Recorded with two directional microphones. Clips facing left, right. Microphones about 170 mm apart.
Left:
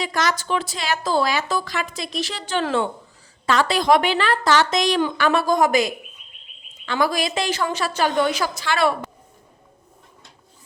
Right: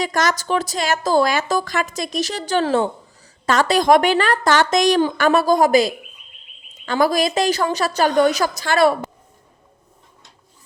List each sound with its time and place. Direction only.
0.0 s a woman's voice: 45° right (ahead or behind)